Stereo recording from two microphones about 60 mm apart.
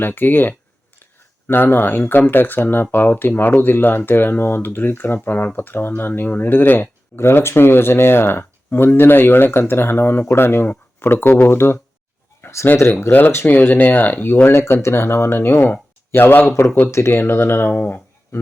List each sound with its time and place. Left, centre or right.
0.0 s speech: left
7.2 s speech: left
12.4 s a sound: left
12.7 s speech: left
14.6 s speech: left
17.7 s a sound: left